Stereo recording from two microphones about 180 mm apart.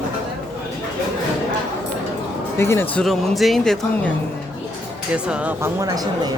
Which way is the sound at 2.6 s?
15° left (ahead or behind).